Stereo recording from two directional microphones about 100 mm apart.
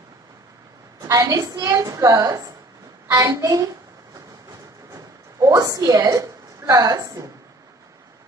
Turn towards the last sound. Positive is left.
turn(degrees=-35)  # may be behind; listen again after turning